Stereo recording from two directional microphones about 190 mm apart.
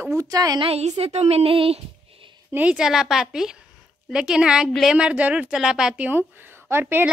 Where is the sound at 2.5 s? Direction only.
5° right (ahead or behind).